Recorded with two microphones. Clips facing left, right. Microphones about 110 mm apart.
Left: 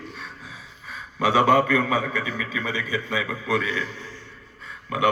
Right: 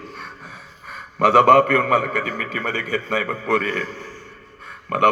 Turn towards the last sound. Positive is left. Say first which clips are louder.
# right 5 dB
turn(degrees=-65)  # may be behind; listen again after turning